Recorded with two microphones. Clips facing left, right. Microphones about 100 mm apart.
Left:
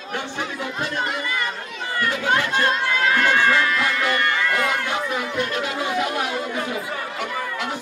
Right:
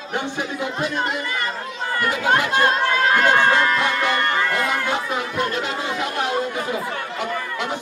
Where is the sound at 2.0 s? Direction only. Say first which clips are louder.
Right 2 dB; 45° right (ahead or behind).